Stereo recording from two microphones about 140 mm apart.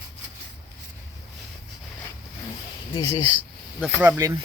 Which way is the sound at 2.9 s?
30° left (ahead or behind).